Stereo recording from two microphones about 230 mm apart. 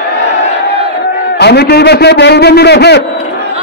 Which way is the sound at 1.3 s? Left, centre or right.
Left.